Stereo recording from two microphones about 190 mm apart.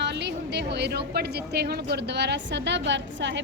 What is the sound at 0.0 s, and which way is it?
A woman's voice, 65° right (ahead or behind).